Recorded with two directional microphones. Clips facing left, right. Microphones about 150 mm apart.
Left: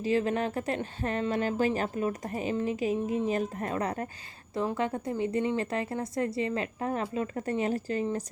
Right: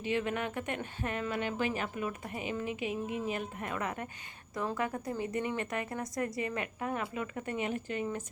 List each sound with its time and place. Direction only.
0.0 s a woman's voice: 35° left (ahead or behind)